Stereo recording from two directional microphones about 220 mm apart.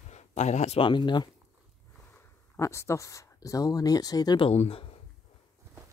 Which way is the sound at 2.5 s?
10° left (ahead or behind).